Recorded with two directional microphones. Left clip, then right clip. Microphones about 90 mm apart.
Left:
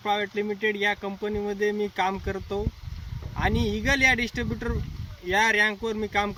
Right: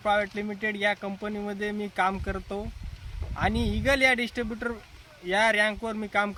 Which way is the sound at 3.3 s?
30° right (ahead or behind).